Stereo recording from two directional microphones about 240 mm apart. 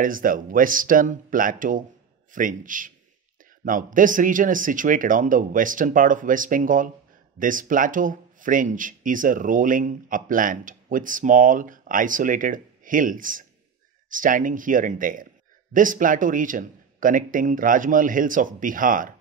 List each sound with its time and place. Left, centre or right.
0.0 s speech: right